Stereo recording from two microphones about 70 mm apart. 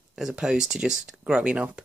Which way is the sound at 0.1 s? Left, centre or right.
Centre.